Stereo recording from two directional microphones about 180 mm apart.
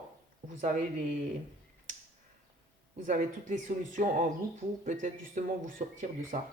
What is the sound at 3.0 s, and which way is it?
Speech, 45° right (ahead or behind).